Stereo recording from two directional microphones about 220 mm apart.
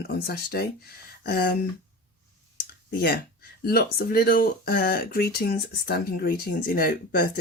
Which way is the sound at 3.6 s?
45° left (ahead or behind).